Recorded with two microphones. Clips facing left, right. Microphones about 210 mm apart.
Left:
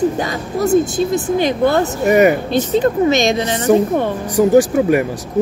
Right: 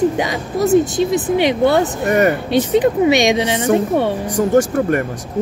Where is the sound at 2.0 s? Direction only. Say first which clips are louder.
Left 7 dB; 10° left (ahead or behind).